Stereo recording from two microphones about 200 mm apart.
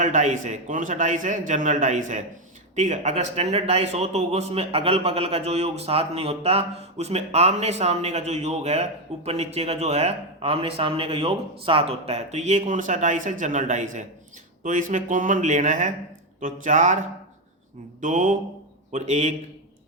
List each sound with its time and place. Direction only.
0.0 s a man's voice: 35° right (ahead or behind)
18.0 s a man's voice: 40° right (ahead or behind)